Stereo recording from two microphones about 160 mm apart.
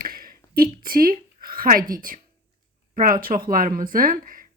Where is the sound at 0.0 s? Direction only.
65° right (ahead or behind).